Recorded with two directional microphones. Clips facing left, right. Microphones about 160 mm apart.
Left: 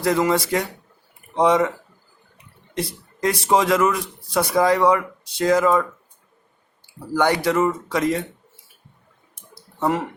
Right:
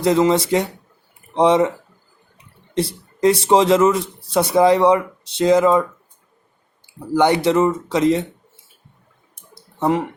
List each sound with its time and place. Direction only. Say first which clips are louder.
0.0 s a man's voice: right 4 dB; 20° right (ahead or behind)
2.7 s a man's voice: right 6 dB; 30° right (ahead or behind)
7.1 s a man's voice: right 4 dB; 20° right (ahead or behind)
9.8 s speech: right 3 dB; 15° right (ahead or behind)